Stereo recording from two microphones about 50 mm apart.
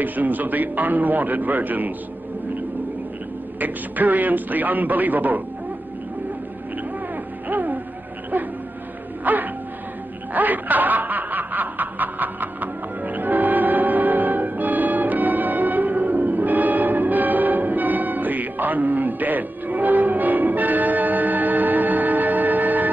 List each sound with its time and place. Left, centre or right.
0.0 s a man's voice: right
3.5 s a man's voice: right
7.4 s music: right
9.2 s music: right
10.3 s snicker: right